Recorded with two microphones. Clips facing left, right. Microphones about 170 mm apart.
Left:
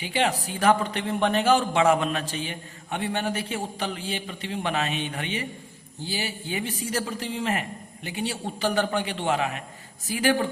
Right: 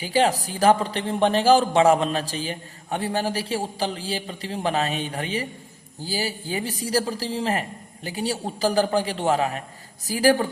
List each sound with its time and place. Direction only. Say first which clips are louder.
0.0 s a man's voice: right 4 dB; 35° right (ahead or behind)